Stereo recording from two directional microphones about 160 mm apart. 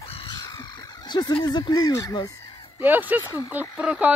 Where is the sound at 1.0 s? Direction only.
25° left (ahead or behind).